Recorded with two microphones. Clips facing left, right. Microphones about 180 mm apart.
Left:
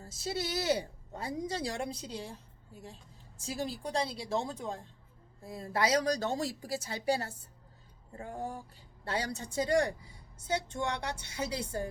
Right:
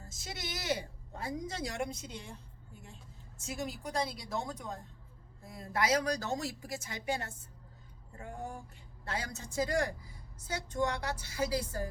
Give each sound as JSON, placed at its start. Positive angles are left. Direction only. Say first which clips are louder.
{"t": 0.0, "sound": "a woman's voice", "louder": "left 8 dB", "side_deg": 30}